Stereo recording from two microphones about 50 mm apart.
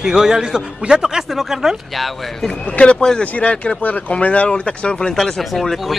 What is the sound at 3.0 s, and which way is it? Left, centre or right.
Speech, centre.